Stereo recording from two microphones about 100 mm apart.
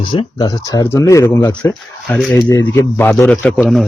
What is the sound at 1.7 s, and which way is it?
Speech, 5° left (ahead or behind).